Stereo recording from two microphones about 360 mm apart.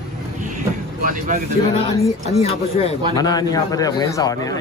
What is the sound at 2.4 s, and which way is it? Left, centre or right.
Speech, centre.